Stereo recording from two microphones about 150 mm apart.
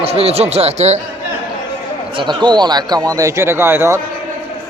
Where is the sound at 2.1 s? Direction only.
35° right (ahead or behind); by 4.0 s 15° right (ahead or behind).